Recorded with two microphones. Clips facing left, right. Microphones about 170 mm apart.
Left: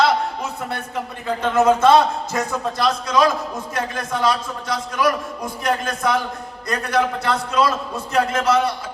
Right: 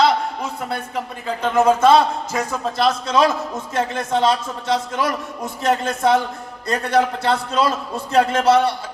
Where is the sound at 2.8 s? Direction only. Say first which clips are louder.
Right 2 dB; 30° right (ahead or behind).